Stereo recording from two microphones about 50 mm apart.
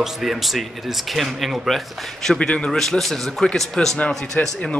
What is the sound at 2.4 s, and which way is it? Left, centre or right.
Speech, centre.